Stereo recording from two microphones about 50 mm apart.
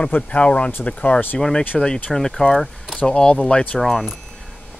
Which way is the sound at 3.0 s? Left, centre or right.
Centre.